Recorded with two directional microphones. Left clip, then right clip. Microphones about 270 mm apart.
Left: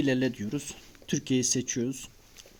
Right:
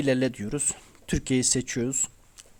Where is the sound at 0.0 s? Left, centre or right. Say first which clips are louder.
Right 3 dB; right.